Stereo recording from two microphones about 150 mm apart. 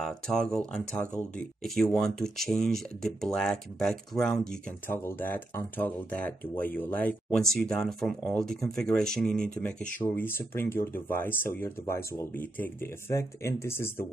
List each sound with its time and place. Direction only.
0.0 s speech: 5° left (ahead or behind)
4.8 s speech: 15° left (ahead or behind)